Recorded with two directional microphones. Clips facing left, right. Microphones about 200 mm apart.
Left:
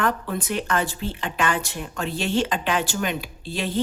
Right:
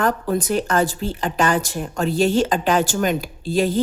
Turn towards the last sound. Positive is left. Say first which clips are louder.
# right 7 dB
turn(degrees=-40)  # may be behind; listen again after turning